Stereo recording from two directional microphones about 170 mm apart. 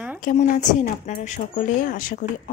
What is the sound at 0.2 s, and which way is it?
Speech, 50° left (ahead or behind).